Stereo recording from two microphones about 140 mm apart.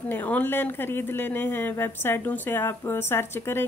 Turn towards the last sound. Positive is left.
turn(degrees=15)  # may be behind; listen again after turning